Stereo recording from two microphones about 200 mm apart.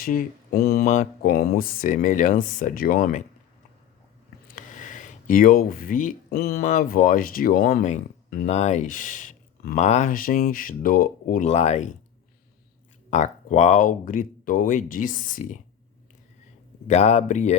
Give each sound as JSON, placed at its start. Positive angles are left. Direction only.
{"t": 0.0, "sound": "speech", "side_deg": 45}
{"t": 0.9, "sound": "speech", "side_deg": 35}
{"t": 1.3, "sound": "speech", "side_deg": 45}
{"t": 4.4, "sound": "speech", "side_deg": 40}
{"t": 13.1, "sound": "speech", "side_deg": 35}
{"t": 16.8, "sound": "speech", "side_deg": 35}